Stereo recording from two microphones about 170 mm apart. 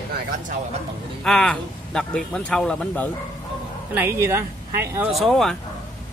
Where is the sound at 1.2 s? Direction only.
5° left (ahead or behind).